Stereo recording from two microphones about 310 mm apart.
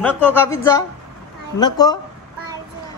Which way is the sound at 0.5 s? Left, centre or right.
Centre.